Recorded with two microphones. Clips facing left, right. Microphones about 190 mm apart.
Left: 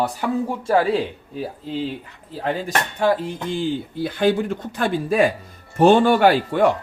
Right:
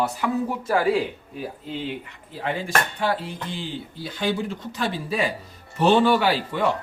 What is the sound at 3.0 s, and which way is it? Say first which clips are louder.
Speech: left 6 dB; 45° left (ahead or behind).